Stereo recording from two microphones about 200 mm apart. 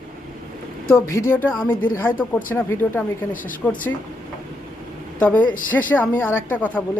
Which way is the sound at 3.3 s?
45° left (ahead or behind).